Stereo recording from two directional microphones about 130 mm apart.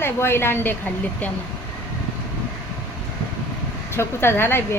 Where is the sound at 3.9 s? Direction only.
20° left (ahead or behind).